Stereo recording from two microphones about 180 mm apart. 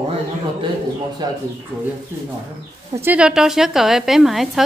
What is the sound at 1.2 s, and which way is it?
Speech, 25° right (ahead or behind).